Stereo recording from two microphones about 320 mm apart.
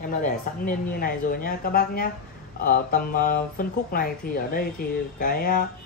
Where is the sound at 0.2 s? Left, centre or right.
Left.